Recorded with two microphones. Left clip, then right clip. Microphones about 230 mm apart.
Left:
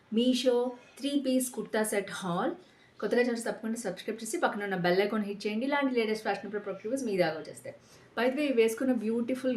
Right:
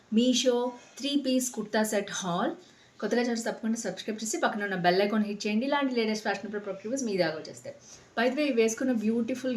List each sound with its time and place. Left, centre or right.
0.1 s speech: centre